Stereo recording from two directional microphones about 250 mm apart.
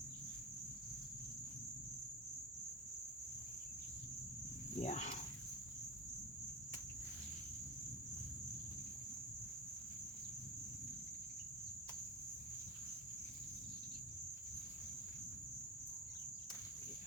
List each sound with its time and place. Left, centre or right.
4.8 s speech: left